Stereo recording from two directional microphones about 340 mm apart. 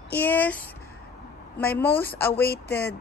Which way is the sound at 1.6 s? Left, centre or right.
Centre.